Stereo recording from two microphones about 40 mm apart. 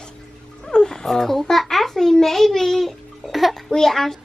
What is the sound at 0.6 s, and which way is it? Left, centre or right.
Dog, centre.